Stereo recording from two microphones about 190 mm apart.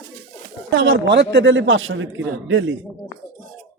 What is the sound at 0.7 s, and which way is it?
A man's voice, 85° right.